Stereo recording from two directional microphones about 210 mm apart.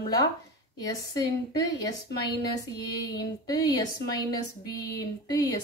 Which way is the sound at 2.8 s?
20° left (ahead or behind).